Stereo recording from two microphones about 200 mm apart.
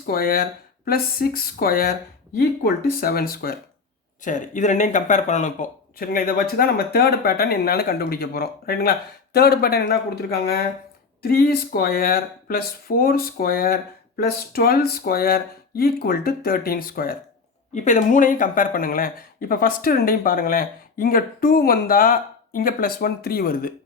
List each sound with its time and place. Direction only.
0.0 s speech: 50° left (ahead or behind)